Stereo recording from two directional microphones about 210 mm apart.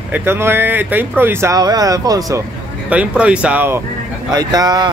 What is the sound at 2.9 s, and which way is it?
Speech, 5° right (ahead or behind).